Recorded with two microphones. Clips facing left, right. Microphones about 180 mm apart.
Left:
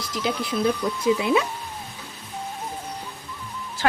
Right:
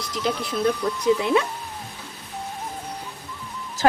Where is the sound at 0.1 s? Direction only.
5° left (ahead or behind).